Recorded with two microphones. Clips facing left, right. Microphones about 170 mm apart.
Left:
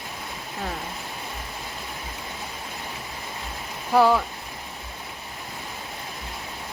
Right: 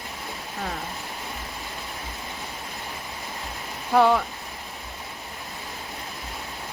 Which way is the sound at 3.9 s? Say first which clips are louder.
Even; 5° left (ahead or behind).